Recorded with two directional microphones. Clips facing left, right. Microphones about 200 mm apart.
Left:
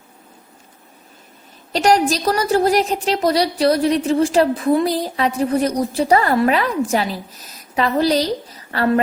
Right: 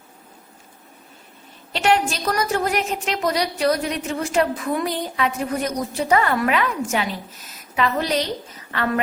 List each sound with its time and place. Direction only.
1.7 s a woman's voice: 40° left (ahead or behind)